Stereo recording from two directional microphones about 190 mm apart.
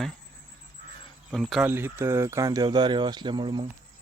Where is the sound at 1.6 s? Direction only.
10° right (ahead or behind).